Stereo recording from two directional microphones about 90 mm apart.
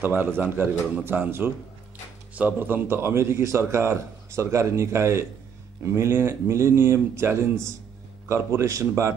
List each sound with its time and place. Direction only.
0.0 s a man's voice: 25° right (ahead or behind)